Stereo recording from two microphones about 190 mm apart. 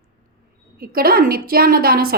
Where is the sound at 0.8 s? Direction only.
50° right (ahead or behind).